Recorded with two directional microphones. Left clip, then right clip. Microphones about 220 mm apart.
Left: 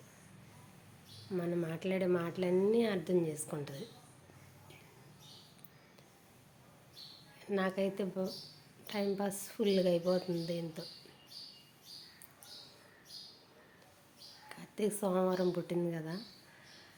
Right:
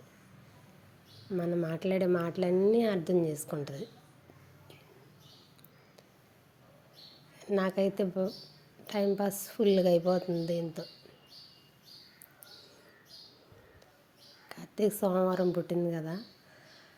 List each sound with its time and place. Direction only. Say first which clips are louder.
1.4 s speech: right 5 dB; 20° right (ahead or behind)
7.3 s speech: right 5 dB; 20° right (ahead or behind)
14.5 s a woman's voice: right 6 dB; 20° right (ahead or behind)